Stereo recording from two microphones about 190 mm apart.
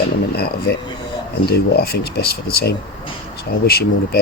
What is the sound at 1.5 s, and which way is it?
Speech, 55° left (ahead or behind).